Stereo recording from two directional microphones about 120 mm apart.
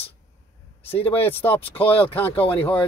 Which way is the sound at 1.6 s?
55° left (ahead or behind).